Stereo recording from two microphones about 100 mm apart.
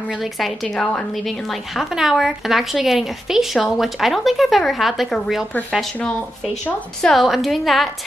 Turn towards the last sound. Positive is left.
turn(degrees=0)  # may be behind; listen again after turning